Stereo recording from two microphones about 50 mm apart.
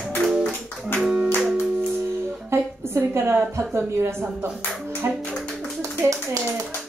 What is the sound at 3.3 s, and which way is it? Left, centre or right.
Speech, right.